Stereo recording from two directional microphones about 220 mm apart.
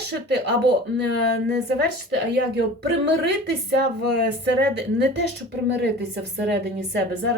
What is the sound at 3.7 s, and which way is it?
Speech, 50° right (ahead or behind).